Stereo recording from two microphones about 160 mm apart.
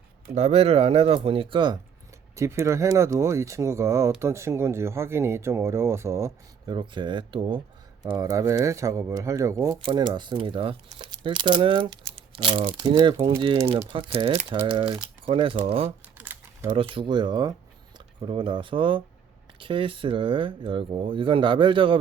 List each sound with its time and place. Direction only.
0.3 s speech: 40° right (ahead or behind)
2.3 s speech: 15° right (ahead or behind)
6.7 s speech: 30° right (ahead or behind)
9.7 s speech: 30° right (ahead or behind)
13.9 s speech: 35° right (ahead or behind)
16.1 s typing: 10° right (ahead or behind)
16.7 s speech: 30° right (ahead or behind)